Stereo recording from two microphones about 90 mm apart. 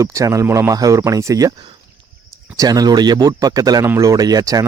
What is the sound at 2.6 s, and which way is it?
Speech, 45° right (ahead or behind).